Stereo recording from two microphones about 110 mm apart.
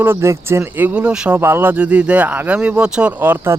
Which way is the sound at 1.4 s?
20° right (ahead or behind).